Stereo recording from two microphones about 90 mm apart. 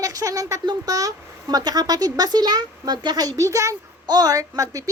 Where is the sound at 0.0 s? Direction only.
40° right (ahead or behind).